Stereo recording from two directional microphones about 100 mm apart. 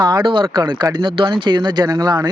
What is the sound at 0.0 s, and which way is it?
Speech, 45° right (ahead or behind).